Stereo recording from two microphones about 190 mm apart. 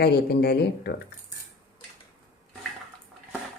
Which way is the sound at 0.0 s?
60° left (ahead or behind).